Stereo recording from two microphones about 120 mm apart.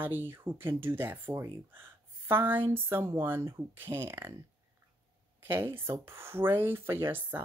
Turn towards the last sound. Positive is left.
turn(degrees=-20)  # may be behind; listen again after turning